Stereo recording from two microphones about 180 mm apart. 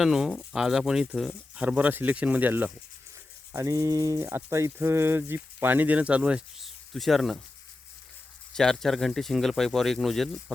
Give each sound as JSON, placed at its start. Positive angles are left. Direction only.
{"t": 0.0, "sound": "speech", "side_deg": -5}
{"t": 8.5, "sound": "speech", "side_deg": 5}